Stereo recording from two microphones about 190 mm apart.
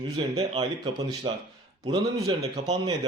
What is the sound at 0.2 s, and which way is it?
Speech, 25° right (ahead or behind).